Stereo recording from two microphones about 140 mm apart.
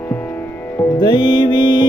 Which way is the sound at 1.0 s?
30° left (ahead or behind).